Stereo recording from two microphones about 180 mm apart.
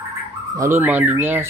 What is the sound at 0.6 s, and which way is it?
Speech, 10° right (ahead or behind).